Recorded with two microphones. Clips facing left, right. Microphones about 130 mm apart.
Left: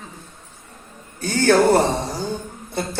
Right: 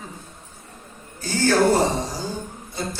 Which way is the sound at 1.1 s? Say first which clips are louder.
Left 1 dB; 60° left (ahead or behind).